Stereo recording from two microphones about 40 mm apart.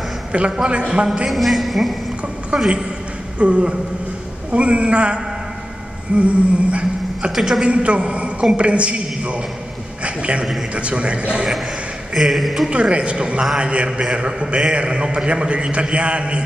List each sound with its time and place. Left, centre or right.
0.3 s a man's voice: right
1.3 s a man's voice: centre
2.5 s a man's voice: right
6.1 s a sound: right
7.3 s a man's voice: centre
7.6 s a man's voice: right
10.0 s a sound: right
10.7 s a man's voice: right
12.1 s a man's voice: centre
12.6 s a man's voice: right